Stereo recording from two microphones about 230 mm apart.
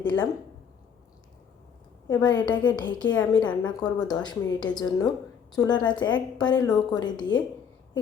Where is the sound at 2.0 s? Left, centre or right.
Centre.